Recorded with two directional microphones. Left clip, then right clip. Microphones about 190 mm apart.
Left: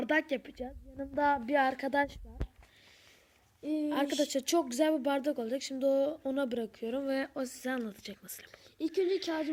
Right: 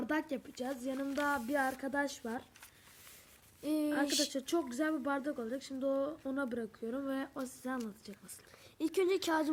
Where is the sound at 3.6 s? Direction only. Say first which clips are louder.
Left 1 dB; 25° right (ahead or behind).